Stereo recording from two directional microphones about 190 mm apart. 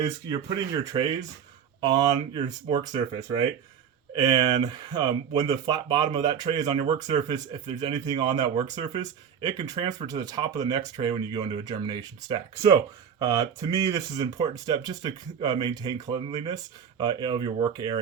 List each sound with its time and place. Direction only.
0.9 s speech: 25° right (ahead or behind)
4.1 s speech: 20° right (ahead or behind)